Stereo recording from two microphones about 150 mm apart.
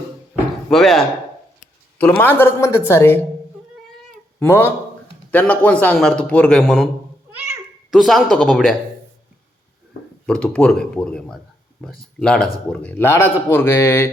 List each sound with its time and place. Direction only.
0.7 s speech: centre (ahead or behind)
2.0 s a man's voice: 10° left (ahead or behind)
4.4 s a man's voice: 15° left (ahead or behind)
7.9 s speech: centre (ahead or behind)
10.2 s a man's voice: 5° left (ahead or behind)